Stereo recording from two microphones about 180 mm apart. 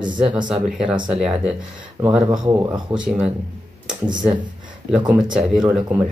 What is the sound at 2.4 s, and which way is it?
Speech, 20° right (ahead or behind).